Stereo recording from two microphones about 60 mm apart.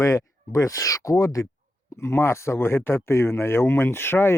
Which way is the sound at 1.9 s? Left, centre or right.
Left.